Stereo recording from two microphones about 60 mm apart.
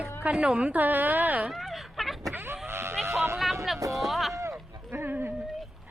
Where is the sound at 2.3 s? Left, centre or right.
Right.